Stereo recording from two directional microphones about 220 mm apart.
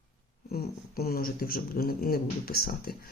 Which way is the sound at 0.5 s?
45° left (ahead or behind).